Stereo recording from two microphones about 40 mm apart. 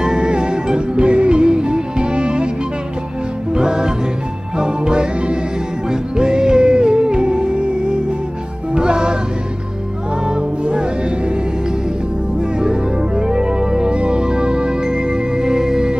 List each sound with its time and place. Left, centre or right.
0.0 s music: right
3.5 s music: centre
10.2 s music: right
12.4 s music: centre